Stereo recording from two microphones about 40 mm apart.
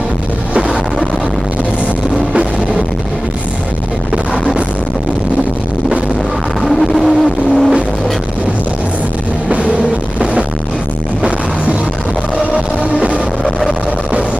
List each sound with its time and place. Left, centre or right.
6.6 s vehicle: centre
12.4 s music: right
13.4 s vehicle: centre